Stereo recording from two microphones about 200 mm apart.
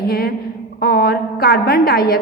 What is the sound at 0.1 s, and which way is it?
A woman's voice, 50° left (ahead or behind).